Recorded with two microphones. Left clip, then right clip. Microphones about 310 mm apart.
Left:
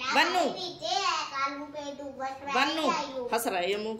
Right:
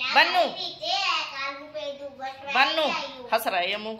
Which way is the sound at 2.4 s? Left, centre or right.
Centre.